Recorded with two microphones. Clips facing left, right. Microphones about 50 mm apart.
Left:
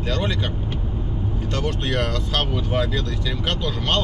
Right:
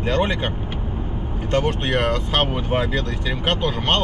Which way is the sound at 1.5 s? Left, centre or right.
Right.